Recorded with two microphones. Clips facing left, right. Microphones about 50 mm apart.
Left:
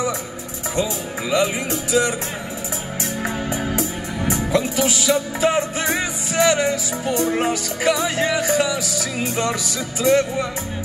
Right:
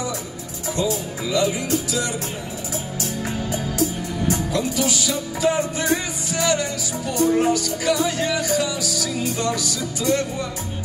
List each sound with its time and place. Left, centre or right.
0.7 s music: left
3.2 s music: left